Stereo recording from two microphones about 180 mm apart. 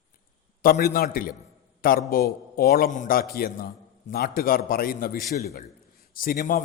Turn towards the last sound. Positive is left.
turn(degrees=50)  # may be behind; listen again after turning